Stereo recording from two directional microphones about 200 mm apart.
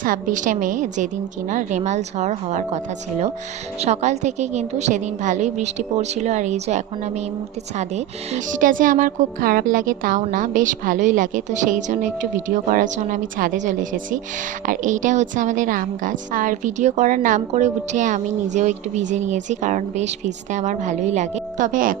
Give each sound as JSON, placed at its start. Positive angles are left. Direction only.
{"t": 0.0, "sound": "speech", "side_deg": -40}